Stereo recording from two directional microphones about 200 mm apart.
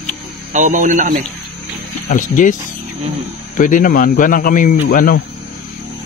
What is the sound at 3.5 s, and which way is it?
Speech, 40° left (ahead or behind).